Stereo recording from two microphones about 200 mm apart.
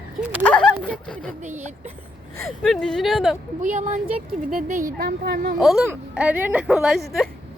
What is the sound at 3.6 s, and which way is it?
A woman's voice, 40° right (ahead or behind).